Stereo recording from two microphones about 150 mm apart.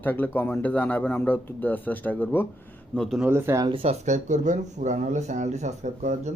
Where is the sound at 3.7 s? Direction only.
45° right (ahead or behind).